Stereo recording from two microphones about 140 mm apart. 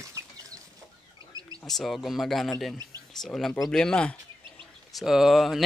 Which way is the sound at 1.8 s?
Centre (ahead or behind).